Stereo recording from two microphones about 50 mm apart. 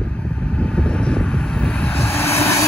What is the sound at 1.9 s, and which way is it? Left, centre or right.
Vehicle, left.